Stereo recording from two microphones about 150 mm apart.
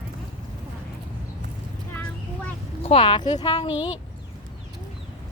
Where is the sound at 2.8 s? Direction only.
35° left (ahead or behind).